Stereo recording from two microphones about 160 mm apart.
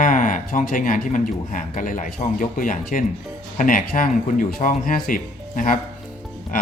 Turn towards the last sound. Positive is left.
turn(degrees=55)  # may be behind; listen again after turning